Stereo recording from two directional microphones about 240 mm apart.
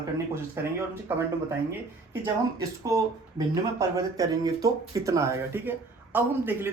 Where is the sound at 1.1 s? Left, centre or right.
Centre.